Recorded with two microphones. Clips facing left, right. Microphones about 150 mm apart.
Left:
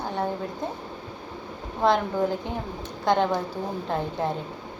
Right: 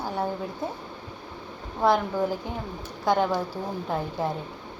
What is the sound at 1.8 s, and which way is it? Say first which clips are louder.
Speech: left 1 dB; 5° right (ahead or behind).